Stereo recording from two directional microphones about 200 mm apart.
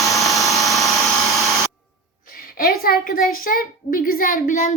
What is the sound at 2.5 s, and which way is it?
A child's voice, 50° left (ahead or behind).